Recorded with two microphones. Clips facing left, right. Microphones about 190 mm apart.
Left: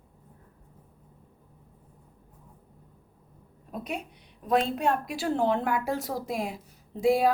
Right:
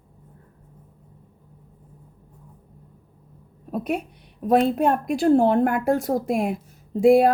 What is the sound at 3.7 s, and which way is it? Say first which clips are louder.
A woman's voice: right 9 dB; 55° right (ahead or behind).